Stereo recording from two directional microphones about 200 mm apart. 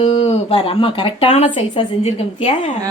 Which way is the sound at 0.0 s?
25° left (ahead or behind).